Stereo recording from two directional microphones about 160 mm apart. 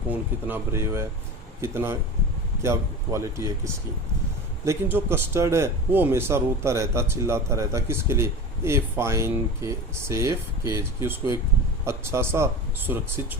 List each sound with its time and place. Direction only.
0.1 s speech: 10° right (ahead or behind)